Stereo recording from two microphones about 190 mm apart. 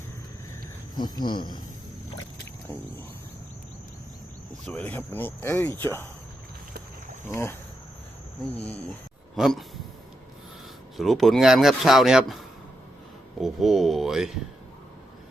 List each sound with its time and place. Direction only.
0.9 s speech: 20° left (ahead or behind)
4.6 s speech: 10° left (ahead or behind)
9.3 s speech: centre (ahead or behind)
10.9 s a man's voice: centre (ahead or behind)
13.4 s a man's voice: centre (ahead or behind)